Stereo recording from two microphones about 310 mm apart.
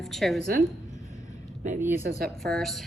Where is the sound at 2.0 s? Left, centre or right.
Right.